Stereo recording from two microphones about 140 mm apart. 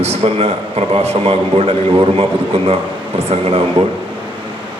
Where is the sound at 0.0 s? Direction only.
50° right (ahead or behind).